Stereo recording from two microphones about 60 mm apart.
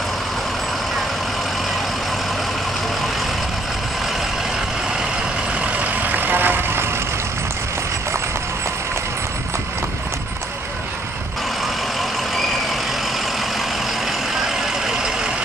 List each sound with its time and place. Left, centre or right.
6.0 s vehicle: right